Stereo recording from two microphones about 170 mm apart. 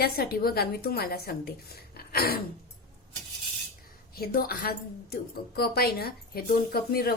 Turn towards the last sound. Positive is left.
turn(degrees=65)  # may be behind; listen again after turning